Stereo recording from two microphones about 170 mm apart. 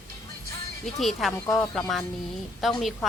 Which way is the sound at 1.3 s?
10° left (ahead or behind).